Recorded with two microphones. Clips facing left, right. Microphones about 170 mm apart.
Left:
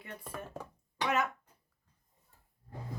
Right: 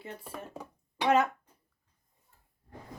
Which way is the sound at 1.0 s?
30° right (ahead or behind).